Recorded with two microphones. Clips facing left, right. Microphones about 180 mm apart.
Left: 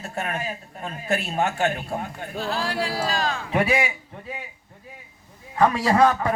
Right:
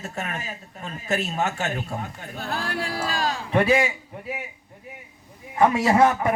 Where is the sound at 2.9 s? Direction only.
40° left (ahead or behind).